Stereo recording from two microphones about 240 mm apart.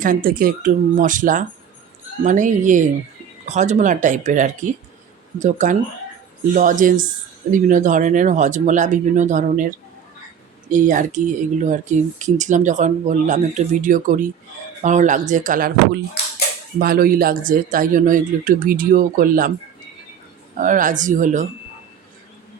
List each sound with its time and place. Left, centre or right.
0.0 s speech: right
20.6 s speech: right